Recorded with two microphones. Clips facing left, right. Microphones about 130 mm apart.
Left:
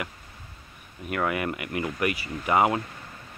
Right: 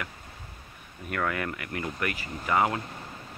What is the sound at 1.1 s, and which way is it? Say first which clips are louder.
Speech: left 3 dB; 15° left (ahead or behind).